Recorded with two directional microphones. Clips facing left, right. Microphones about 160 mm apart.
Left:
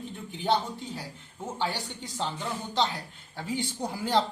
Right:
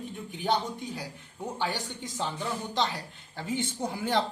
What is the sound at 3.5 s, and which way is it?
Speech, 20° right (ahead or behind).